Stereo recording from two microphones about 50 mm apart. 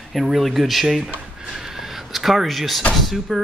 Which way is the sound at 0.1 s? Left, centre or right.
Centre.